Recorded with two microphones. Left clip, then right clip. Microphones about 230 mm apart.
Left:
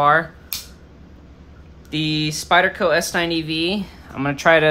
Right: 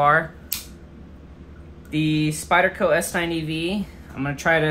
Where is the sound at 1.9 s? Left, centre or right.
Centre.